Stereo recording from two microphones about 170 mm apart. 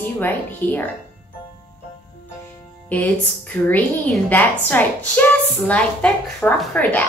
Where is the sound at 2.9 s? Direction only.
10° left (ahead or behind).